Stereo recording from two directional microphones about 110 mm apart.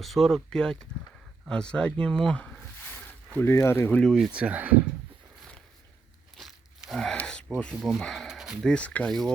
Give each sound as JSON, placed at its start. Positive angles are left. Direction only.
{"t": 0.0, "sound": "speech", "side_deg": 0}
{"t": 4.0, "sound": "speech", "side_deg": 0}
{"t": 4.4, "sound": "speech", "side_deg": -15}
{"t": 6.3, "sound": "tearing", "side_deg": 0}
{"t": 7.2, "sound": "a sound", "side_deg": 10}
{"t": 7.8, "sound": "speech", "side_deg": 0}
{"t": 8.7, "sound": "speech", "side_deg": 10}